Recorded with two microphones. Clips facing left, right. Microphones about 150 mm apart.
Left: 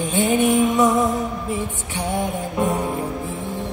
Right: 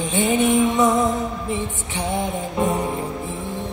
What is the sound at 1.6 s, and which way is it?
Music, 20° right (ahead or behind).